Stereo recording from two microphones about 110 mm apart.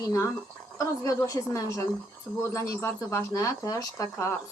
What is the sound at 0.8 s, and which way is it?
A woman's voice, 30° left (ahead or behind).